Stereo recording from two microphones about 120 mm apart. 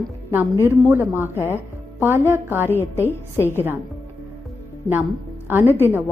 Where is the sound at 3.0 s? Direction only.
20° left (ahead or behind).